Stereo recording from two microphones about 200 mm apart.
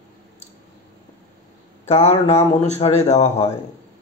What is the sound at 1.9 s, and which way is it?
A man's voice, 35° left (ahead or behind).